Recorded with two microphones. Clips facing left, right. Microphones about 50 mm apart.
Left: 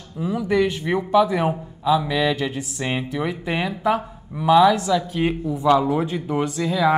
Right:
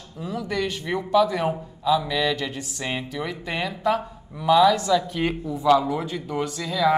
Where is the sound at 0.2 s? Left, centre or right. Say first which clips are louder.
Left 7 dB; centre.